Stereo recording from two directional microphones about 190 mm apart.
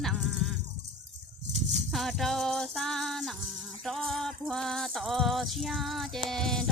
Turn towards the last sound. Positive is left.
turn(degrees=0)  # may be behind; listen again after turning